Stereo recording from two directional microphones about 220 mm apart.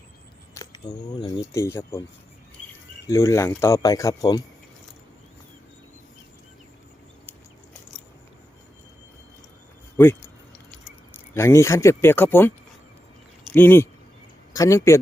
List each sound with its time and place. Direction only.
0.5 s speech: 15° left (ahead or behind)
3.1 s speech: 15° left (ahead or behind)
10.0 s speech: 10° left (ahead or behind)